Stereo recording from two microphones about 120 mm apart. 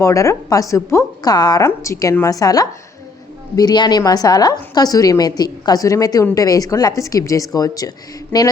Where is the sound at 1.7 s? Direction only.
25° left (ahead or behind).